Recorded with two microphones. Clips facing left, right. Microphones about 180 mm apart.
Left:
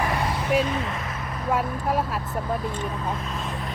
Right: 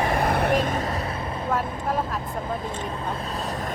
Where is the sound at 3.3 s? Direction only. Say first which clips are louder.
Right 2 dB; 40° right (ahead or behind).